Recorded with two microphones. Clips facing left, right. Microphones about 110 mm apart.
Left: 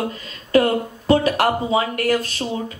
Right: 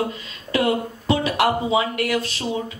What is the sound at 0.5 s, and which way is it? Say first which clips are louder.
Speech: left 4 dB; 45° left (ahead or behind).